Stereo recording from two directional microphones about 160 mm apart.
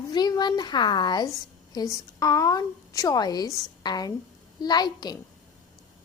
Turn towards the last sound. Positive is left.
turn(degrees=25)  # may be behind; listen again after turning